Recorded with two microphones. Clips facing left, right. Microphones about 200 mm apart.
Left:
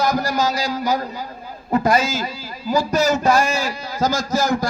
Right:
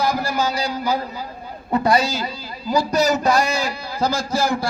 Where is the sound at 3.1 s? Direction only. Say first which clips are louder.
Left 1 dB; 35° right (ahead or behind).